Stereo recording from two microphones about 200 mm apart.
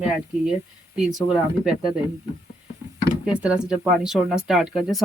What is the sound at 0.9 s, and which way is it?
Speech, centre (ahead or behind).